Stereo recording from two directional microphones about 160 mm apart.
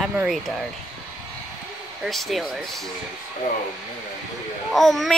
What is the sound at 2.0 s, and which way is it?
Speech, centre (ahead or behind).